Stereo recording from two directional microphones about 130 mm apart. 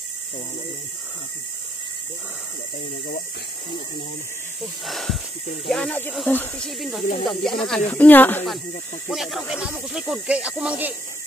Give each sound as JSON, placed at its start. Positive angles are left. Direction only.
{"t": 4.6, "sound": "speech", "side_deg": 0}
{"t": 6.8, "sound": "speech", "side_deg": 0}
{"t": 7.8, "sound": "speech", "side_deg": 15}
{"t": 9.1, "sound": "speech", "side_deg": 0}